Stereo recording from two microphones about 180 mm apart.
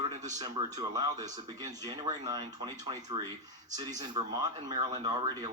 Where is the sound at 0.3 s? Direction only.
20° right (ahead or behind).